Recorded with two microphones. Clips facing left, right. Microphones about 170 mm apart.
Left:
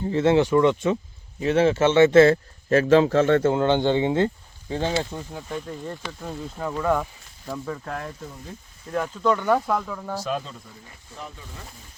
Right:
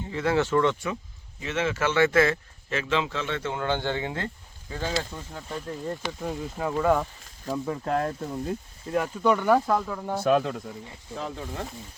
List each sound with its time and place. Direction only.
0.0 s speech: 30° left (ahead or behind)
0.4 s speech: 15° left (ahead or behind)
1.4 s speech: 35° left (ahead or behind)
3.5 s speech: 25° left (ahead or behind)
5.5 s speech: centre (ahead or behind); by 7.8 s 15° right (ahead or behind)
8.9 s speech: 10° right (ahead or behind)
10.2 s speech: 70° right (ahead or behind)